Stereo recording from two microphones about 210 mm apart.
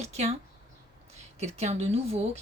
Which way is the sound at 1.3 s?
30° right (ahead or behind).